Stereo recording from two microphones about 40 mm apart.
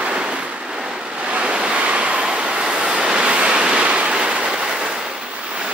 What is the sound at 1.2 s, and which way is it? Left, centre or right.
Waves, right.